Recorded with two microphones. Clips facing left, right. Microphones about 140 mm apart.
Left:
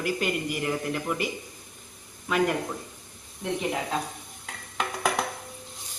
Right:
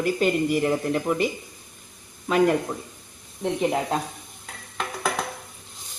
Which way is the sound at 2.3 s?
35° right (ahead or behind).